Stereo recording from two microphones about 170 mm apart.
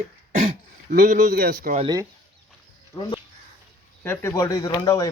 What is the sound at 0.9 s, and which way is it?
Speech, 55° right (ahead or behind).